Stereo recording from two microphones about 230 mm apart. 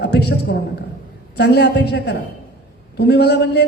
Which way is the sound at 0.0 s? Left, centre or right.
Left.